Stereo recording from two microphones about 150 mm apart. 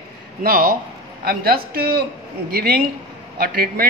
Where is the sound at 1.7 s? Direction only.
90° right.